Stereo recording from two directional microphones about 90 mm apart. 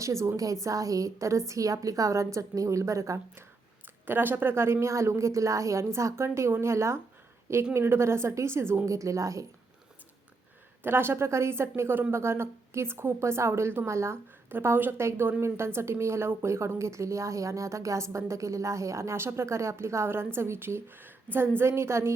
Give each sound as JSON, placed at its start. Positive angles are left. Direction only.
{"t": 0.0, "sound": "speech", "side_deg": -35}
{"t": 4.0, "sound": "a woman's voice", "side_deg": -20}
{"t": 10.8, "sound": "a woman's voice", "side_deg": -25}